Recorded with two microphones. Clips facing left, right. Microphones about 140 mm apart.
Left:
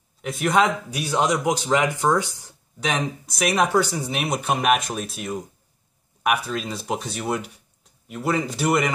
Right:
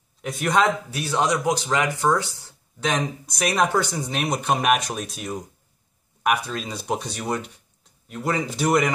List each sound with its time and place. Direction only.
0.2 s speech: centre (ahead or behind); by 2.2 s 20° left (ahead or behind)
2.8 s speech: 10° left (ahead or behind)